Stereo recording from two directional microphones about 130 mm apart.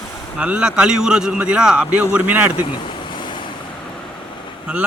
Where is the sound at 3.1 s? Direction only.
35° left (ahead or behind).